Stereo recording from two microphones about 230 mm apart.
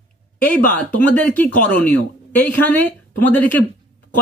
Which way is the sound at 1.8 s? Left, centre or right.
Centre.